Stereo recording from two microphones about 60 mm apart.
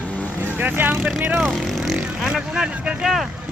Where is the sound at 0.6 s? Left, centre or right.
Right.